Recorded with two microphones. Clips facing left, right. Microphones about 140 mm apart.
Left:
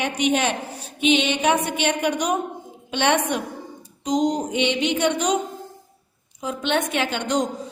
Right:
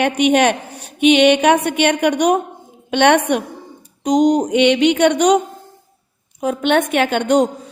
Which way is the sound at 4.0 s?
70° right (ahead or behind).